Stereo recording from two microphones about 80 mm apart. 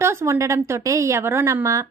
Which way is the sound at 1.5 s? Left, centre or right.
Right.